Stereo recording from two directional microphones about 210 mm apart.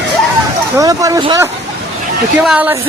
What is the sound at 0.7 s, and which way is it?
Speech, 15° right (ahead or behind).